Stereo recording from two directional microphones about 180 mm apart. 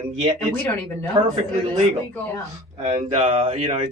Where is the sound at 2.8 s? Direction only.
35° right (ahead or behind).